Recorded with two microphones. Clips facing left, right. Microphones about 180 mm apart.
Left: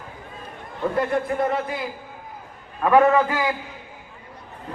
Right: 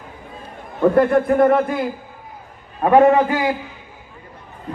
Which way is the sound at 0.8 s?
55° right (ahead or behind).